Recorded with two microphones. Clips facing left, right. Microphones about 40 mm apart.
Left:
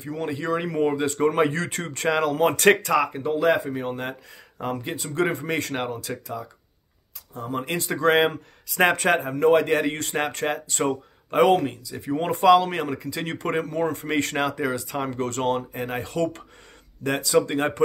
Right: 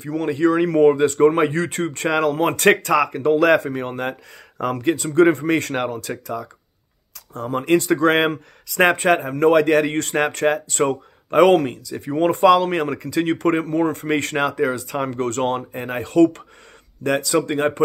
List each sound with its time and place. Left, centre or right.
0.0 s speech: right
0.7 s speech: right
1.0 s speech: right
1.3 s speech: right
3.2 s speech: right
7.6 s speech: right
13.2 s speech: right
16.0 s speech: right
17.4 s speech: right